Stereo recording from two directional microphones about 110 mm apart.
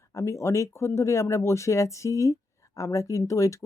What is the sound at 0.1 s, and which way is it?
Speech, 25° left (ahead or behind).